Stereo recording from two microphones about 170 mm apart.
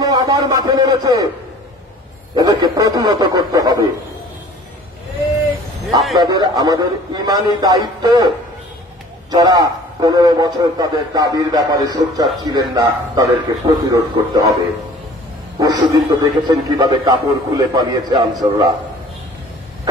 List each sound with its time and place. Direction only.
0.0 s speech: 20° right (ahead or behind)
2.3 s a man's voice: 20° right (ahead or behind)
6.1 s a man's voice: 25° right (ahead or behind)
9.3 s a man's voice: 25° right (ahead or behind)
15.6 s a man's voice: 20° right (ahead or behind)